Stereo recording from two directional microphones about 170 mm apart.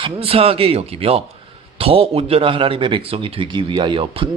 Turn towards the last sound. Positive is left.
turn(degrees=-30)  # may be behind; listen again after turning